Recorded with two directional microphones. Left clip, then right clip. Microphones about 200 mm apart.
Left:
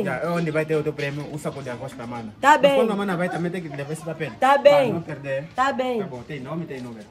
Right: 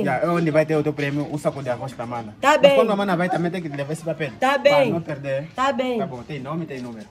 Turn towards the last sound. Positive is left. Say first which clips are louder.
# right 1 dB
turn(degrees=5)  # may be behind; listen again after turning